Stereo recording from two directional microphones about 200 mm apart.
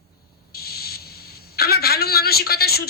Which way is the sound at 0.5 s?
50° left (ahead or behind).